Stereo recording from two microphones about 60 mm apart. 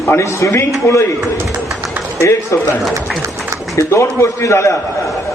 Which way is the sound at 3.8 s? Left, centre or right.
Left.